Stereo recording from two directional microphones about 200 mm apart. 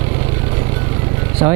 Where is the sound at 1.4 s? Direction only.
20° right (ahead or behind).